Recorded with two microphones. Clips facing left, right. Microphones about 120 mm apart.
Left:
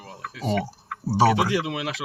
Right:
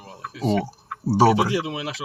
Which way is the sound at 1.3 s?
30° right (ahead or behind).